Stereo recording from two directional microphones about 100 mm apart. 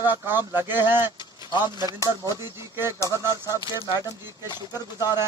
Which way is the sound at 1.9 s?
35° left (ahead or behind).